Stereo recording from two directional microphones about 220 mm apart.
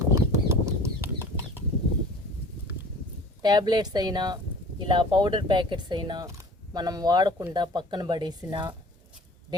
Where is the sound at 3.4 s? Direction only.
20° right (ahead or behind).